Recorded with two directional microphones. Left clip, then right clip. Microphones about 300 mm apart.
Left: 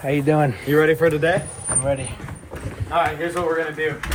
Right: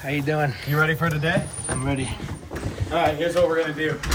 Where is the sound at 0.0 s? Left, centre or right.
Left.